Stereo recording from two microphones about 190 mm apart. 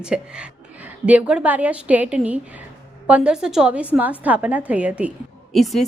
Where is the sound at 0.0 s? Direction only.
5° right (ahead or behind).